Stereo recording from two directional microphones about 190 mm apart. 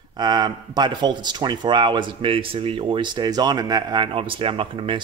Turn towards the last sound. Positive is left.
turn(degrees=-30)  # may be behind; listen again after turning